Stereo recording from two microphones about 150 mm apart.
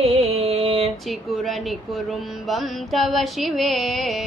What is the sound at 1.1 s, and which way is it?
Speech, centre (ahead or behind).